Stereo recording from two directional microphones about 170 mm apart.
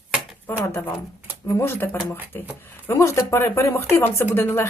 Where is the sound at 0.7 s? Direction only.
15° left (ahead or behind).